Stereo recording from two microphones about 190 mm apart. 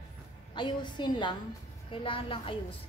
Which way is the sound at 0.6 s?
25° left (ahead or behind).